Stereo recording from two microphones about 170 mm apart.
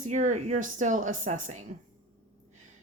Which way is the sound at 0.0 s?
45° right (ahead or behind).